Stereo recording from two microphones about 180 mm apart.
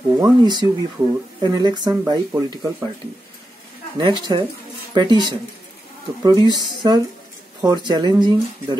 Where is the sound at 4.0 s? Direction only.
25° right (ahead or behind).